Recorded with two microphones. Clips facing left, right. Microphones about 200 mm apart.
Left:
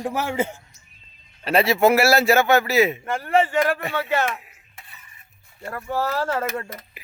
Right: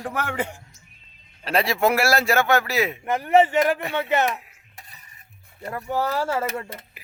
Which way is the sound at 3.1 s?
20° right (ahead or behind).